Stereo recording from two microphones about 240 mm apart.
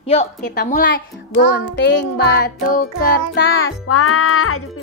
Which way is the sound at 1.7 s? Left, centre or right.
Left.